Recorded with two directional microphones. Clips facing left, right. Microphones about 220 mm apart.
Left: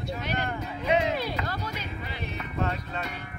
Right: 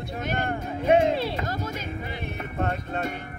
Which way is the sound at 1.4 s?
45° right (ahead or behind).